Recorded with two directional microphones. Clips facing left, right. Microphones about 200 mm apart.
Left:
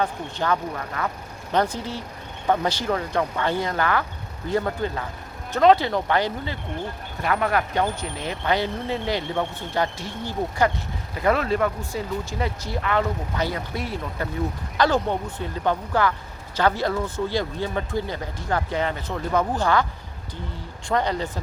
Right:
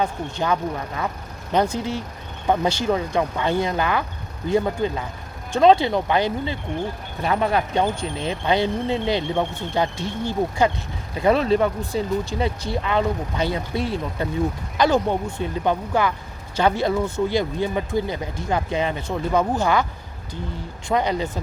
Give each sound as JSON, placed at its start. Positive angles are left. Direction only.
{"t": 0.0, "sound": "speech", "side_deg": -10}
{"t": 2.9, "sound": "speech", "side_deg": -10}
{"t": 14.8, "sound": "speech", "side_deg": -10}
{"t": 20.8, "sound": "speech", "side_deg": -10}